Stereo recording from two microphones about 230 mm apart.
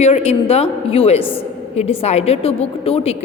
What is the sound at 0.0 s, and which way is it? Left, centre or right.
A woman's voice, left.